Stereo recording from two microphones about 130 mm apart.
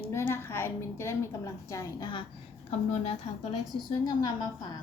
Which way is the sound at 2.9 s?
55° left (ahead or behind).